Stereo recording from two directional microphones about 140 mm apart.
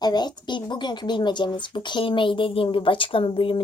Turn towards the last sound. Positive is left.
turn(degrees=40)  # may be behind; listen again after turning